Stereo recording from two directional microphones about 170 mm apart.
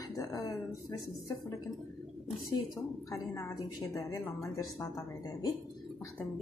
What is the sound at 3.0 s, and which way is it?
Speech, 20° left (ahead or behind).